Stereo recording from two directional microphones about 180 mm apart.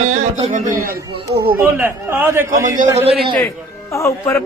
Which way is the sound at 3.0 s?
35° right (ahead or behind).